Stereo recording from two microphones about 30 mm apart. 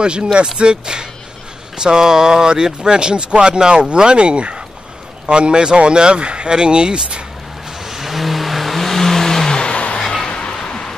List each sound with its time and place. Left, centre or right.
0.0 s speech: right
7.8 s vehicle: centre
9.6 s vehicle: left
9.9 s a sound: left